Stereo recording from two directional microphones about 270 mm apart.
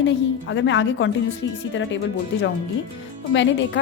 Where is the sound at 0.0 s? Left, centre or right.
Left.